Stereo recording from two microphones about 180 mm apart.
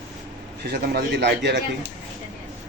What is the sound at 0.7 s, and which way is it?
A man's voice, 70° right (ahead or behind).